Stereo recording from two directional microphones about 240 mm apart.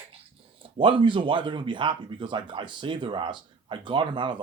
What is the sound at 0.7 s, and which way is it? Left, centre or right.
Speech, right.